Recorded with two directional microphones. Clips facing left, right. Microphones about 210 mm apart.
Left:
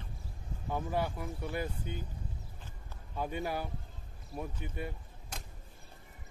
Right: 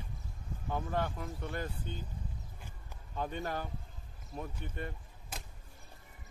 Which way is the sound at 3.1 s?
10° left (ahead or behind).